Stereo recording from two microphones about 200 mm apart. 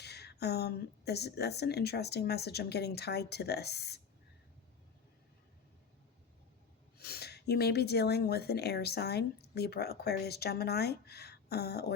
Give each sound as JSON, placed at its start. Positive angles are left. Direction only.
{"t": 0.0, "sound": "speech", "side_deg": 55}
{"t": 7.0, "sound": "speech", "side_deg": 55}